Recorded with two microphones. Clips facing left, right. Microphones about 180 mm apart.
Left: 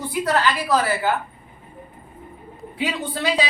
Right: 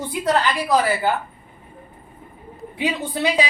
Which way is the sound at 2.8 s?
15° right (ahead or behind).